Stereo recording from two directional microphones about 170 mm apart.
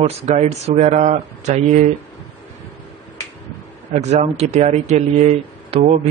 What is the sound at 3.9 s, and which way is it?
Speech, 40° right (ahead or behind).